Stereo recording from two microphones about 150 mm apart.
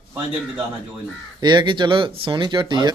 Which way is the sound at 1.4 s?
30° right (ahead or behind).